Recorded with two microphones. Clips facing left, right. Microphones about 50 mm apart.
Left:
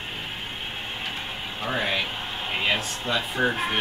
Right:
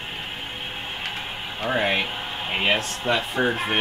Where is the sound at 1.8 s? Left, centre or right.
Right.